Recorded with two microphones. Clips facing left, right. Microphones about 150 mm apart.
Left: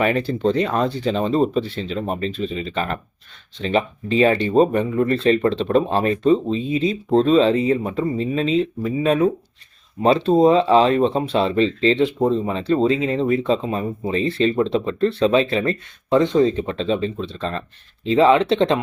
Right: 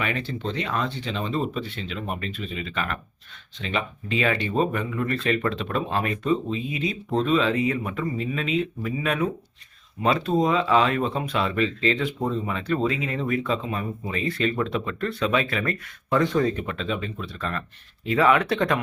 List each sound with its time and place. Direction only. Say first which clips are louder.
0.0 s speech: left 10 dB; 40° left (ahead or behind); by 18.8 s 25° left (ahead or behind)